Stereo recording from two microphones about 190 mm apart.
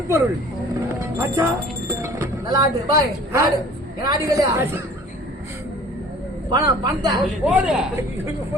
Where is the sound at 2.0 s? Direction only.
15° right (ahead or behind).